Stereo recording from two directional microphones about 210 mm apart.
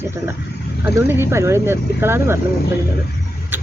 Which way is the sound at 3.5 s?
10° right (ahead or behind).